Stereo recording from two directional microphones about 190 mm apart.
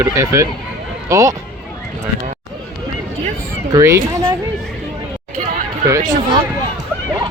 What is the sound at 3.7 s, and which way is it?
Speech, 20° right (ahead or behind).